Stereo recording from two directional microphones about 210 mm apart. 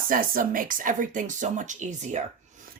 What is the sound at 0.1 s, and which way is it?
Speech, 40° right (ahead or behind).